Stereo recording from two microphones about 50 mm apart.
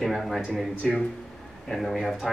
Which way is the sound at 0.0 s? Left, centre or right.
Centre.